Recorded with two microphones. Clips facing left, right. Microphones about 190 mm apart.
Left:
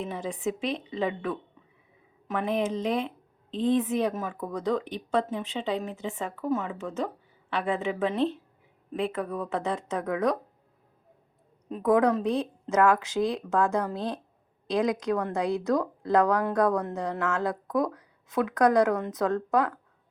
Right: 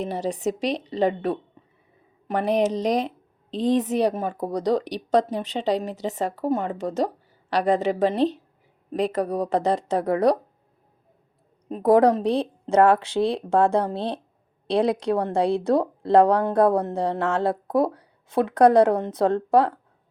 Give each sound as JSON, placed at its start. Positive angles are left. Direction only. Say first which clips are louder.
{"t": 0.0, "sound": "a woman's voice", "louder": "right 5 dB", "side_deg": -80}
{"t": 4.2, "sound": "speech", "louder": "right 6 dB", "side_deg": -35}
{"t": 11.8, "sound": "speech", "louder": "right 5 dB", "side_deg": -35}